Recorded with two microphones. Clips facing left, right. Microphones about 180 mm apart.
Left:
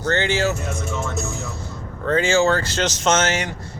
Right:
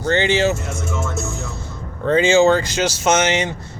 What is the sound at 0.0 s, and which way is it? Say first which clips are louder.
Speech: right 3 dB; 20° right (ahead or behind).